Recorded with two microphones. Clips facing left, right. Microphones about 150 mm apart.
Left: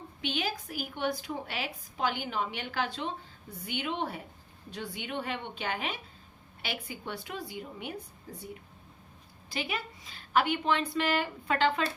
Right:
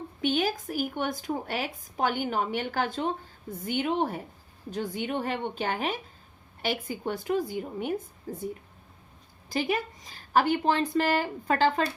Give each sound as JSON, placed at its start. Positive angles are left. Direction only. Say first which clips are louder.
{"t": 0.2, "sound": "a woman's voice", "louder": "right 7 dB", "side_deg": -45}
{"t": 9.5, "sound": "a woman's voice", "louder": "right 7 dB", "side_deg": -45}